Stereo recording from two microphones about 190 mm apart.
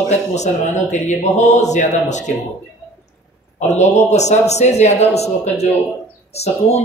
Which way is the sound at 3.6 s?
35° left (ahead or behind).